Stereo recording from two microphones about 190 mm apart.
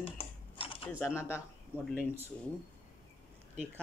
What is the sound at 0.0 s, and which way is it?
Typing, 30° left (ahead or behind).